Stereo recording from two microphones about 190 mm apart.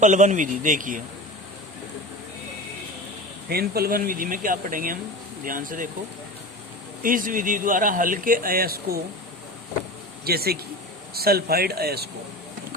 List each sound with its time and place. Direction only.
0.0 s speech: 40° right (ahead or behind)
3.5 s speech: 55° right (ahead or behind)
7.0 s speech: 45° right (ahead or behind)
10.2 s speech: 55° right (ahead or behind)